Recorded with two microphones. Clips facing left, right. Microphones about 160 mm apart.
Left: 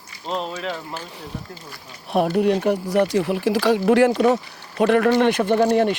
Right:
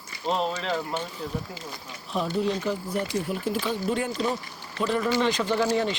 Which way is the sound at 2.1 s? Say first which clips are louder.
Left 8 dB; 65° left (ahead or behind).